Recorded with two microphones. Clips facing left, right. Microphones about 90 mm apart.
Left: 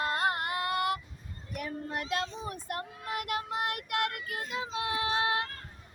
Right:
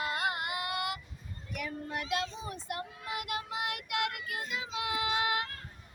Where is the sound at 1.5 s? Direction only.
40° left (ahead or behind).